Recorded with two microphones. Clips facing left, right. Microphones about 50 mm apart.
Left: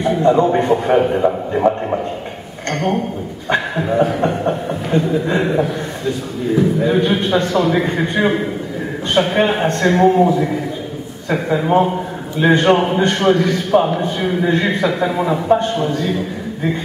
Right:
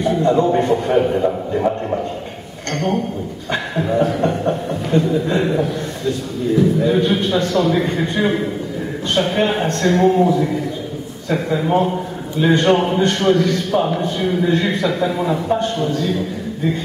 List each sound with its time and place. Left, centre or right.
0.0 s a man's voice: centre
2.7 s a man's voice: centre